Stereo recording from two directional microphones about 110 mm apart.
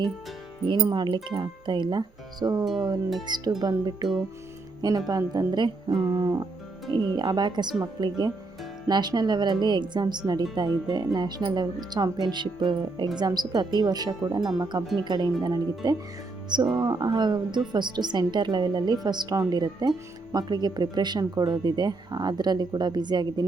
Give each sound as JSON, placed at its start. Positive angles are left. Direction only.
{"t": 0.8, "sound": "a woman's voice", "side_deg": -40}